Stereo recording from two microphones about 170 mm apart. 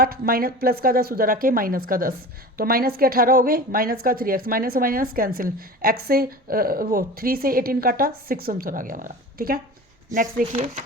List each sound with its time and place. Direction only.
0.0 s a woman's voice: 60° right (ahead or behind)
10.1 s speech: 20° right (ahead or behind)